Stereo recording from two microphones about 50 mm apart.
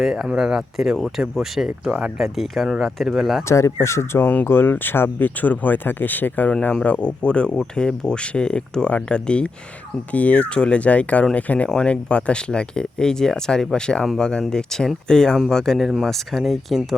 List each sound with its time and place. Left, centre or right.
0.0 s speech: centre
3.5 s speech: left
4.4 s speech: left; by 16.8 s centre